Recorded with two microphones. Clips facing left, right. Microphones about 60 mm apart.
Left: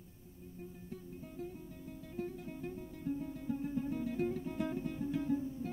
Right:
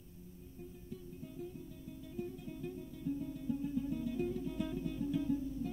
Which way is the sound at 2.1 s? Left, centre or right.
Left.